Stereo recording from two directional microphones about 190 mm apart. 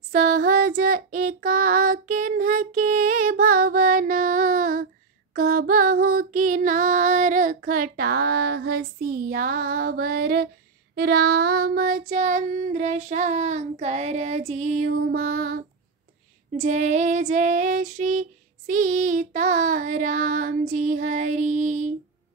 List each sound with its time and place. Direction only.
0.1 s child singing: 50° right (ahead or behind)
5.3 s female singing: 50° right (ahead or behind)
11.0 s child singing: 55° right (ahead or behind)
16.5 s child singing: 35° right (ahead or behind)